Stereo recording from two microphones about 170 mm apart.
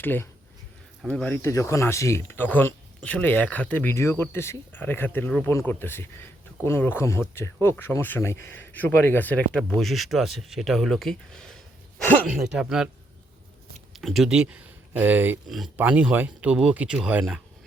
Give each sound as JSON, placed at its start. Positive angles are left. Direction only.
{"t": 0.0, "sound": "speech", "side_deg": 10}
{"t": 13.9, "sound": "speech", "side_deg": 0}
{"t": 15.4, "sound": "speech", "side_deg": 0}